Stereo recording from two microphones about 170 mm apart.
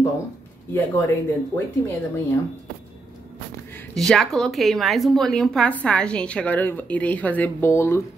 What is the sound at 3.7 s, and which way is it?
Speech, 5° left (ahead or behind).